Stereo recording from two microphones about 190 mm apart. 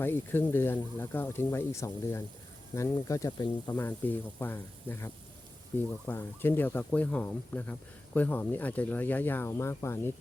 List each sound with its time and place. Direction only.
0.0 s speech: 10° left (ahead or behind)
4.0 s speech: 10° left (ahead or behind)